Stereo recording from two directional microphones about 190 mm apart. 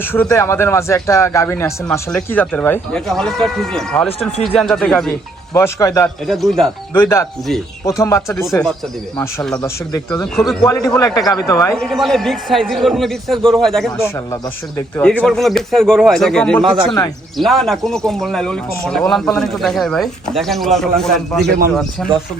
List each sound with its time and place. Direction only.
0.0 s speech: 10° left (ahead or behind)
5.5 s speech: 15° left (ahead or behind)
6.2 s speech: centre (ahead or behind); by 10.2 s 15° left (ahead or behind)
10.3 s speech: centre (ahead or behind)
10.6 s speech: 20° left (ahead or behind); by 21.5 s centre (ahead or behind)